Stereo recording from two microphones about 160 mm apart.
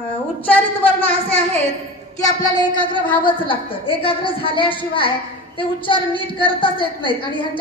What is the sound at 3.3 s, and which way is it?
A woman's voice, 30° left (ahead or behind).